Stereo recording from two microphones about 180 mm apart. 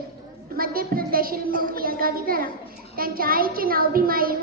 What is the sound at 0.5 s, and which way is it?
A woman's voice, 55° right (ahead or behind).